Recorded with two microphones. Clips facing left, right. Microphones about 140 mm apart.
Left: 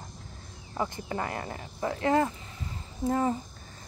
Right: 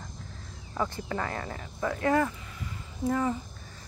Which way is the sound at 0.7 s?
25° left (ahead or behind).